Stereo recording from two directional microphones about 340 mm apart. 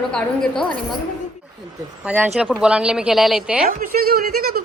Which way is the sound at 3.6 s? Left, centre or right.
Right.